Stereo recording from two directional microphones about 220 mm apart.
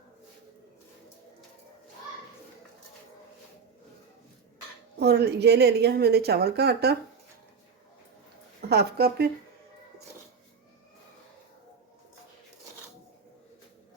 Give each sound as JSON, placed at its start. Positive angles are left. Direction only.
{"t": 4.9, "sound": "a woman's voice", "side_deg": -50}
{"t": 8.7, "sound": "a woman's voice", "side_deg": -45}